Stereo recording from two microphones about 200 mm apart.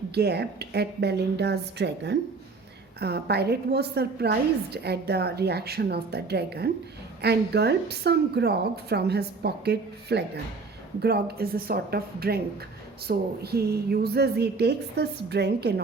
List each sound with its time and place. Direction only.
0.1 s a woman's voice: 55° right (ahead or behind)